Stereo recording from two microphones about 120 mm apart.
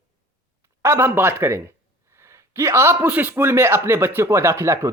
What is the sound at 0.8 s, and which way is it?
Speech, 20° right (ahead or behind).